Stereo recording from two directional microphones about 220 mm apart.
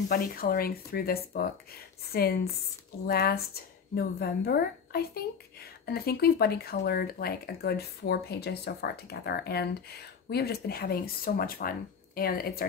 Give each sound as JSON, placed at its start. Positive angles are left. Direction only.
{"t": 0.1, "sound": "a woman's voice", "side_deg": 40}